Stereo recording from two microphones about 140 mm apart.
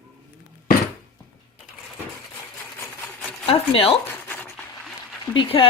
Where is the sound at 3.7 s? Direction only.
40° left (ahead or behind).